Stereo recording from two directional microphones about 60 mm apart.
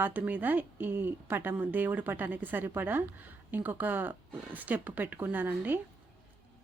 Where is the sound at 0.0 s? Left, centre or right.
Right.